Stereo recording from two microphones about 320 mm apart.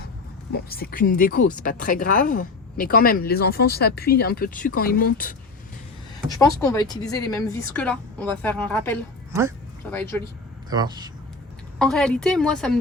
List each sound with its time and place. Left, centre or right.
0.5 s speech: left
6.4 s a woman's voice: centre
9.3 s speech: centre
9.9 s speech: centre
10.7 s speech: centre
11.8 s a woman's voice: centre